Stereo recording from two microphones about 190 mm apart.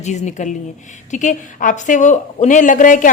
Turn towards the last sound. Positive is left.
turn(degrees=45)  # may be behind; listen again after turning